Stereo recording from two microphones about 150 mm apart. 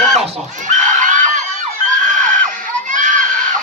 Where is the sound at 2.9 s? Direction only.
60° right (ahead or behind).